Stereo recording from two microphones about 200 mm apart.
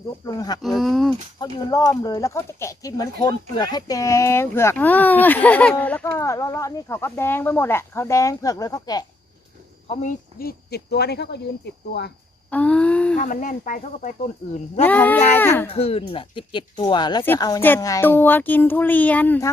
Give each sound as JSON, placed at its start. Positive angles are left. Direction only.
{"t": 0.3, "sound": "speech", "side_deg": 20}
{"t": 0.6, "sound": "speech", "side_deg": 0}
{"t": 1.4, "sound": "speech", "side_deg": 20}
{"t": 9.9, "sound": "speech", "side_deg": 40}
{"t": 12.5, "sound": "a sound", "side_deg": 5}
{"t": 13.1, "sound": "speech", "side_deg": 40}
{"t": 14.8, "sound": "speech", "side_deg": 10}
{"t": 15.7, "sound": "speech", "side_deg": 30}